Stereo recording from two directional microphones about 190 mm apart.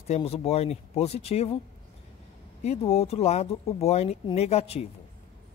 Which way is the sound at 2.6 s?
35° left (ahead or behind).